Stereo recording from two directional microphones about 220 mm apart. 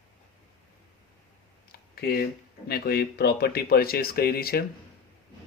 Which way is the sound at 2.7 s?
45° left (ahead or behind).